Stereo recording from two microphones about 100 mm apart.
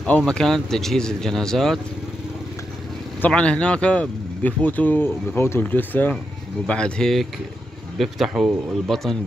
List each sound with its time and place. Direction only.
0.2 s speech: 5° left (ahead or behind)
3.2 s speech: 10° left (ahead or behind)